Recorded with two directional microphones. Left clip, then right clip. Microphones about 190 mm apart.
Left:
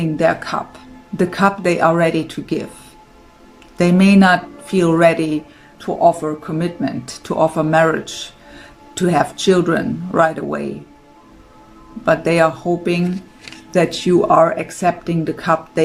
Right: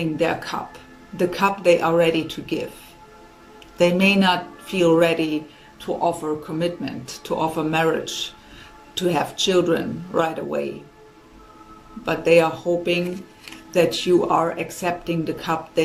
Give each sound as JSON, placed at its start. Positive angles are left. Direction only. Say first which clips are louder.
{"t": 0.2, "sound": "speech", "louder": "left 9 dB", "side_deg": 40}
{"t": 3.8, "sound": "speech", "louder": "left 3 dB", "side_deg": 40}
{"t": 12.0, "sound": "speech", "louder": "left 3 dB", "side_deg": 40}